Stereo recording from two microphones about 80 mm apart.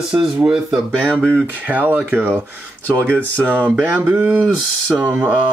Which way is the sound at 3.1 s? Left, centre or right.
Centre.